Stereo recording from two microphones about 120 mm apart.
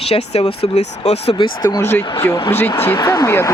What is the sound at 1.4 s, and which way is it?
Speech, 35° left (ahead or behind).